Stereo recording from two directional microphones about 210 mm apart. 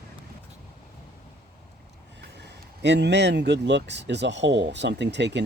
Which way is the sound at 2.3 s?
55° right (ahead or behind).